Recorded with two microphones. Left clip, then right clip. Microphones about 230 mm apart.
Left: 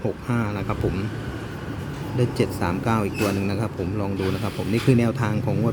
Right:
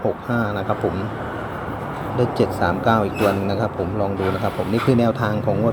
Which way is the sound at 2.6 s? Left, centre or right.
Left.